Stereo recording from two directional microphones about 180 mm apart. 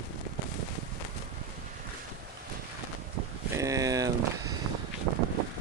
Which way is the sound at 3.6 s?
20° right (ahead or behind).